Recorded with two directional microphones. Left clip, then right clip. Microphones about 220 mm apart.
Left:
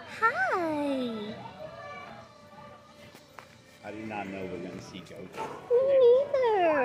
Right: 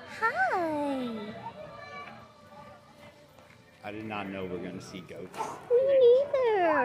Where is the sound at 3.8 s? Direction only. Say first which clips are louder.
Even; 45° right (ahead or behind).